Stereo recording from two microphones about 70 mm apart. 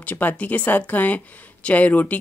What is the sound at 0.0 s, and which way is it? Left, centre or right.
Speech, left.